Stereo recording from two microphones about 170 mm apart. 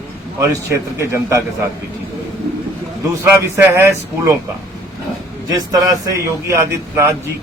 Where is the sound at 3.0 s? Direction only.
15° right (ahead or behind).